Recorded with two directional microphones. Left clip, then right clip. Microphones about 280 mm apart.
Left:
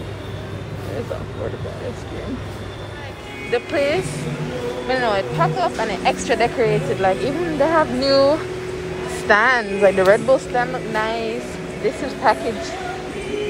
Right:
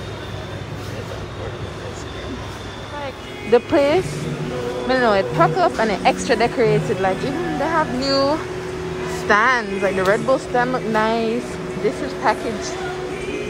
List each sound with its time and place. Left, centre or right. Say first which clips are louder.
3.5 s speech: right 4 dB; centre